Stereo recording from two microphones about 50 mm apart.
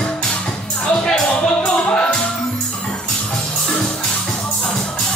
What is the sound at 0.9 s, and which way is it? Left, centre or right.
Music, centre.